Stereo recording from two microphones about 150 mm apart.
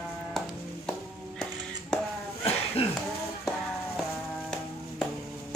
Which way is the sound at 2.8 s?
40° left (ahead or behind).